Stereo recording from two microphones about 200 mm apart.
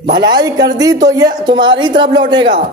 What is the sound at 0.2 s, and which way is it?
A woman's voice, 20° right (ahead or behind).